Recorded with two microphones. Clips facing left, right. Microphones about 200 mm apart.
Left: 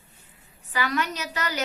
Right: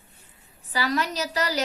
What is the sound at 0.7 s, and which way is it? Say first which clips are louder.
Speech: right 1 dB; 35° right (ahead or behind).